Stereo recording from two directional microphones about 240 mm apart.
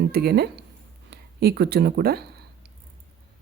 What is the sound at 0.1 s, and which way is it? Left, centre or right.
Speech, right.